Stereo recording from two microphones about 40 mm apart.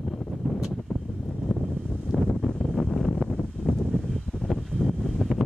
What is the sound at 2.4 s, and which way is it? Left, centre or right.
Wind noise, centre.